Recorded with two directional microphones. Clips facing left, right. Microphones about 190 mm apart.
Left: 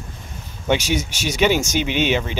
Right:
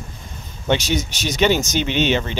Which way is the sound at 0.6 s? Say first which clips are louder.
Even; 10° left (ahead or behind).